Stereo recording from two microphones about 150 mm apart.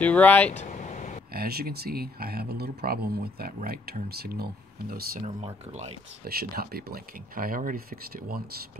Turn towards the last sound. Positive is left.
turn(degrees=-65)  # may be behind; listen again after turning